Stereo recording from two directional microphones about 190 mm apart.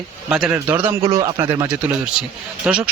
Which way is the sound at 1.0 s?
25° right (ahead or behind).